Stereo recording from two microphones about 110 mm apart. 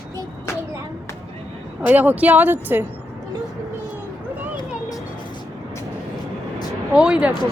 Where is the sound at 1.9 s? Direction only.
15° right (ahead or behind).